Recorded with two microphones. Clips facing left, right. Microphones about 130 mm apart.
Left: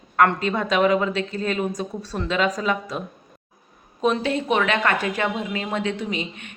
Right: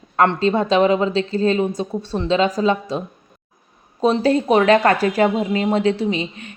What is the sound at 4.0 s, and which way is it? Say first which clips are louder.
Speech: right 5 dB; 35° right (ahead or behind).